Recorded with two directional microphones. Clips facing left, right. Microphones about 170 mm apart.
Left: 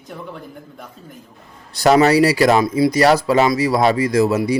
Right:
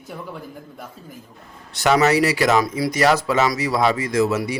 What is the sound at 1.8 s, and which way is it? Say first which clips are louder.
Speech: left 4 dB; 35° left (ahead or behind).